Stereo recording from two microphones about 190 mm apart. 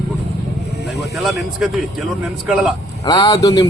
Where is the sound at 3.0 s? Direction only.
20° left (ahead or behind).